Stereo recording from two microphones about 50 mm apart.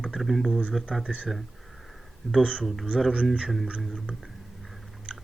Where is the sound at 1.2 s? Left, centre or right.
Centre.